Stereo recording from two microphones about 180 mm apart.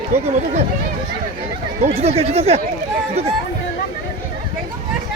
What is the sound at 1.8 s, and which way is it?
Speech, 35° right (ahead or behind).